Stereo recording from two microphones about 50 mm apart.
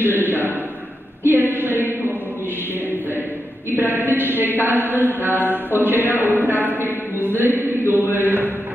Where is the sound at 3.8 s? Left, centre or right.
Right.